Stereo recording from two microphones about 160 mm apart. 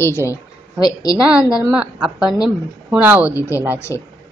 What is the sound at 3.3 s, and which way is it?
Speech, 20° left (ahead or behind).